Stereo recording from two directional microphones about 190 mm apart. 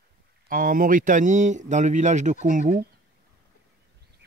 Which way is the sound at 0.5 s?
50° right (ahead or behind).